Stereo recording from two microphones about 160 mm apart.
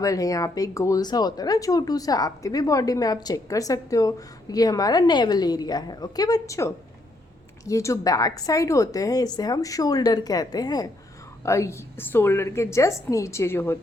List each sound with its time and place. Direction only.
0.0 s a woman's voice: 20° left (ahead or behind)